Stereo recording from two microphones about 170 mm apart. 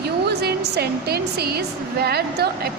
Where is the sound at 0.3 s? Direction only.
75° right (ahead or behind).